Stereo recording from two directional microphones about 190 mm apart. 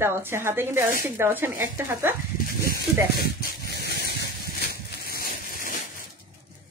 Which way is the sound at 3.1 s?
55° left (ahead or behind).